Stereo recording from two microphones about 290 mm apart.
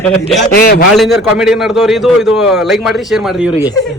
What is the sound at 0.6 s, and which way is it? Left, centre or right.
Speech, left.